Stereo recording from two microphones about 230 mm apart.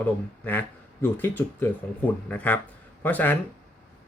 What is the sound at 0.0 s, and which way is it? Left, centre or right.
Speech, centre.